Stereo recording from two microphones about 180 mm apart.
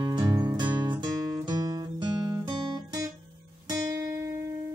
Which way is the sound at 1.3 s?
20° right (ahead or behind).